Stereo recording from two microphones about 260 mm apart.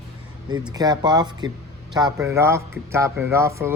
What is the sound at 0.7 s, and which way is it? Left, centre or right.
Speech, centre.